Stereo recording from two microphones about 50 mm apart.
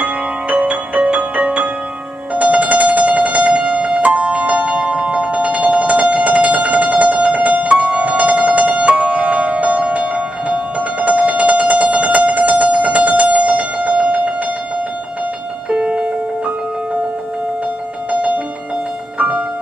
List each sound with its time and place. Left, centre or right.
0.0 s music: right
15.7 s music: right
18.1 s music: right